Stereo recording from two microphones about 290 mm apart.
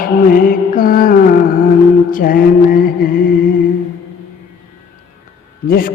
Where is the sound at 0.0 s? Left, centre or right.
Left.